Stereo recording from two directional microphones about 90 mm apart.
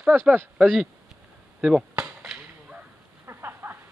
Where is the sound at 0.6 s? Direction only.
5° right (ahead or behind).